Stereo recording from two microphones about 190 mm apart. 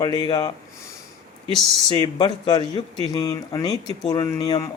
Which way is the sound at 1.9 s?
25° left (ahead or behind).